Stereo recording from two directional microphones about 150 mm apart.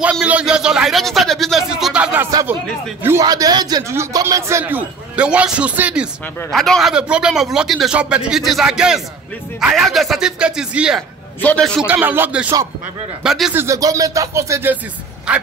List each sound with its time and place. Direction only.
0.0 s a man's voice: 10° right (ahead or behind)
2.3 s music: 25° right (ahead or behind)
3.0 s a man's voice: 20° right (ahead or behind)
11.4 s a man's voice: 5° left (ahead or behind)
11.9 s a man's voice: 15° right (ahead or behind)
13.6 s music: 20° right (ahead or behind)
15.3 s a man's voice: 5° right (ahead or behind)